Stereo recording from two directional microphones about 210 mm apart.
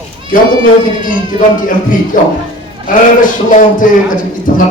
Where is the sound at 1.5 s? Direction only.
40° left (ahead or behind).